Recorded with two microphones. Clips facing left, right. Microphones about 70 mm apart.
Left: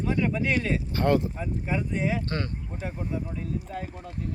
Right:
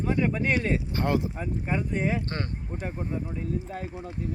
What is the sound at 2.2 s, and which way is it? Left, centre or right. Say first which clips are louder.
Speech: left 2 dB; right.